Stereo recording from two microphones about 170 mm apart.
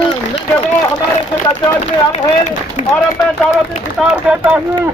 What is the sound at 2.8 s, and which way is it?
Speech, 45° left (ahead or behind).